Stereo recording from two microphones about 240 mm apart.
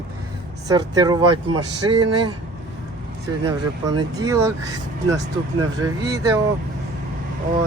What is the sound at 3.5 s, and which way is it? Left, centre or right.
Speech, centre.